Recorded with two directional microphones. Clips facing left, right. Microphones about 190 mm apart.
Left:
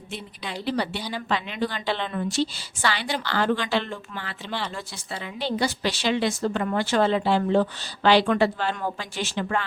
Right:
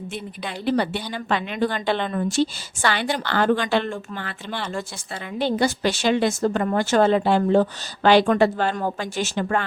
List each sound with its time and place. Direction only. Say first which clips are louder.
0.1 s a woman's voice: left 2 dB; 50° right (ahead or behind)